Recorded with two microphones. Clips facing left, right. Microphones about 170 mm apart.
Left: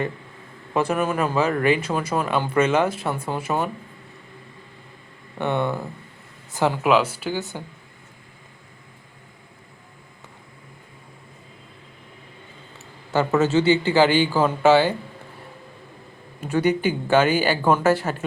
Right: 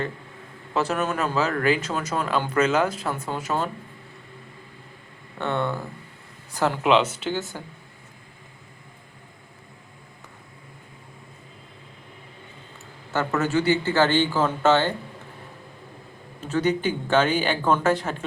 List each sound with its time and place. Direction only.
0.7 s speech: 10° left (ahead or behind)
5.4 s speech: 15° left (ahead or behind)
6.8 s speech: 5° left (ahead or behind)
13.1 s speech: 20° left (ahead or behind)
16.4 s speech: 10° left (ahead or behind)